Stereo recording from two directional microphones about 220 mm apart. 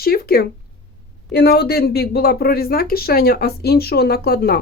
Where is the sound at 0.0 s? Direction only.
45° left (ahead or behind).